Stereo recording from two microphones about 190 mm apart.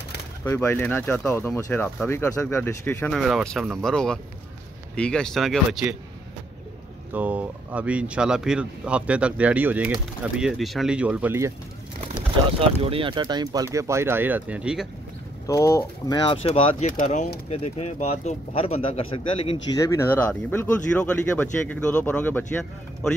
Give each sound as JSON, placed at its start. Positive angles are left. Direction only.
{"t": 0.4, "sound": "speech", "side_deg": 10}
{"t": 7.2, "sound": "speech", "side_deg": -10}
{"t": 12.5, "sound": "speech", "side_deg": -30}
{"t": 15.4, "sound": "speech", "side_deg": 15}
{"t": 19.8, "sound": "speech", "side_deg": 15}